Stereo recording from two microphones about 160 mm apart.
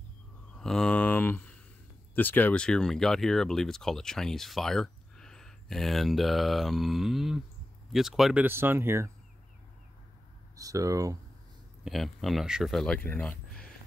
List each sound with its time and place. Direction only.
0.6 s mantra: 5° left (ahead or behind)
2.1 s speech: 10° left (ahead or behind)
8.5 s speech: 15° right (ahead or behind)
10.5 s speech: 20° right (ahead or behind)
11.8 s speech: centre (ahead or behind)
13.2 s a sound: 5° left (ahead or behind)